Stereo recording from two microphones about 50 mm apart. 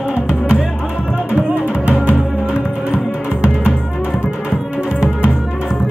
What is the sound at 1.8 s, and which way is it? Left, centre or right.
Music, right.